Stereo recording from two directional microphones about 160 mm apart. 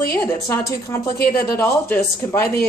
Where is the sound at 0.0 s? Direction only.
20° left (ahead or behind).